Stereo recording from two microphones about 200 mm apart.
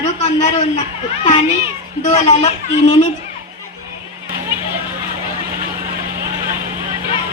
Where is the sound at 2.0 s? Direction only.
35° left (ahead or behind).